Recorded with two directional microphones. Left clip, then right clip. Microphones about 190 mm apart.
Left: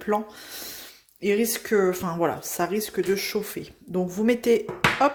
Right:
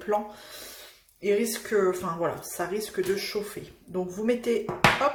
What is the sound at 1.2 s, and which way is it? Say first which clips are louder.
Speech: left 2 dB; 50° left (ahead or behind).